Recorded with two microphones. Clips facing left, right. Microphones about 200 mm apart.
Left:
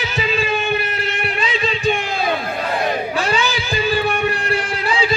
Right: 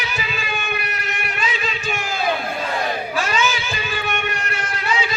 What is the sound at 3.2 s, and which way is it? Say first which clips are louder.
Music: left 2 dB; 35° left (ahead or behind).